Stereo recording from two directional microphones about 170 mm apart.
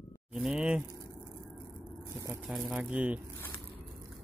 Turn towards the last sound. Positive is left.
turn(degrees=10)  # may be behind; listen again after turning